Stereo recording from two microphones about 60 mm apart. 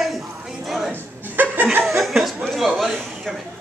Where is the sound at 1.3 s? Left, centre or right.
Right.